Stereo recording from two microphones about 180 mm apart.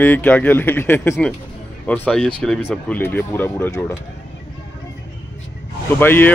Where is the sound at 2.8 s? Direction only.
10° left (ahead or behind).